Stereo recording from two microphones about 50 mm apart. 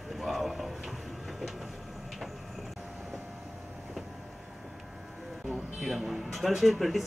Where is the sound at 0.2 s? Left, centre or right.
Centre.